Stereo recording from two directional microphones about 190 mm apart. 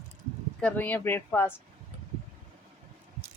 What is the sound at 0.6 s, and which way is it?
Speech, 10° left (ahead or behind).